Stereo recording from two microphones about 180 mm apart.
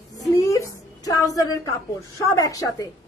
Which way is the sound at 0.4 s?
15° left (ahead or behind).